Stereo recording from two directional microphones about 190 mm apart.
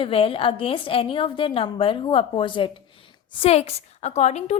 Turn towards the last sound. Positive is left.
turn(degrees=35)  # may be behind; listen again after turning